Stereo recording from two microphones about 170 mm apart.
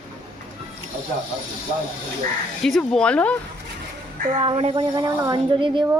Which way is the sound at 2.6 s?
5° left (ahead or behind).